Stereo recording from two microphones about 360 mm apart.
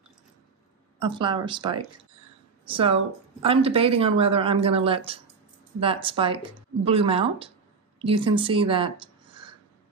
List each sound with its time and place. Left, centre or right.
0.9 s speech: centre